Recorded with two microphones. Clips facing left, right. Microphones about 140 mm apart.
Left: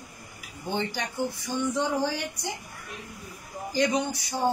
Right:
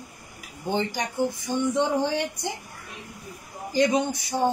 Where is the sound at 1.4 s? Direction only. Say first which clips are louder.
Right 3 dB; 20° right (ahead or behind).